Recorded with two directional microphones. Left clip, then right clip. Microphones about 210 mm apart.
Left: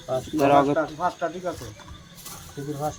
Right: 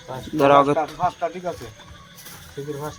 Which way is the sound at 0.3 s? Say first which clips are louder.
Right 4 dB; 25° right (ahead or behind).